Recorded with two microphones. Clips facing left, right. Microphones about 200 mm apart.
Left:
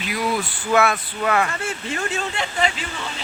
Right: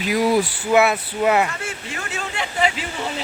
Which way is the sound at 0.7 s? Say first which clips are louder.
Right 2 dB; 20° right (ahead or behind).